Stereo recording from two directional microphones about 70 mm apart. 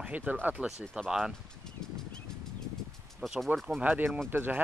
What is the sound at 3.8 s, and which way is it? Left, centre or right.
Speech, right.